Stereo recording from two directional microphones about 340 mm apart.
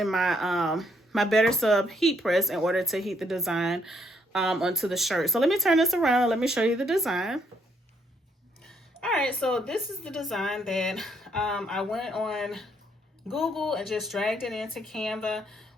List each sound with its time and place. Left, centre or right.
0.0 s speech: centre
8.6 s speech: centre